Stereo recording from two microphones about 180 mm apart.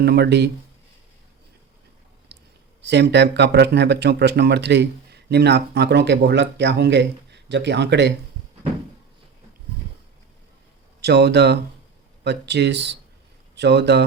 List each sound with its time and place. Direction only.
0.0 s speech: 65° right (ahead or behind)
2.3 s clicking: 65° right (ahead or behind)
2.8 s speech: 70° right (ahead or behind)
11.0 s speech: 65° right (ahead or behind)